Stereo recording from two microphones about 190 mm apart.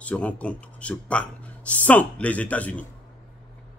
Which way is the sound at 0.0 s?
5° left (ahead or behind).